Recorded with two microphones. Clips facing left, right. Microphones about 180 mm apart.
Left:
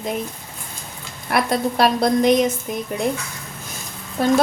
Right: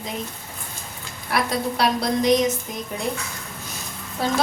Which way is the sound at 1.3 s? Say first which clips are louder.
Left 4 dB; 55° left (ahead or behind).